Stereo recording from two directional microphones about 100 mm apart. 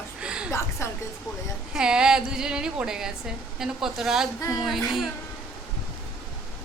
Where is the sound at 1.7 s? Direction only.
5° right (ahead or behind).